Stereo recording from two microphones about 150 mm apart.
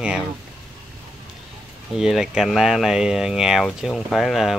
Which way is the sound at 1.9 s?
5° right (ahead or behind).